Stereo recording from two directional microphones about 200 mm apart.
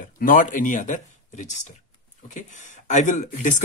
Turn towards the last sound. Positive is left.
turn(degrees=40)  # may be behind; listen again after turning